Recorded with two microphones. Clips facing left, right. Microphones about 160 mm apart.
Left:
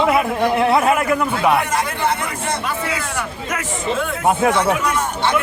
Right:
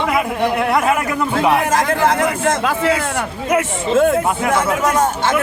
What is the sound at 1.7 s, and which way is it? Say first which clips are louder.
Speech: right 5 dB; 90° right.